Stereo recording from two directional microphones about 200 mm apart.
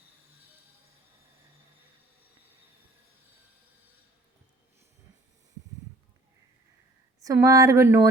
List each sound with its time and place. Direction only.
7.2 s speech: 15° right (ahead or behind)